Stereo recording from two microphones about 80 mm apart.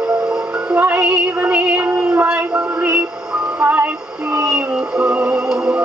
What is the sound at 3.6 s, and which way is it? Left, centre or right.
Music, right.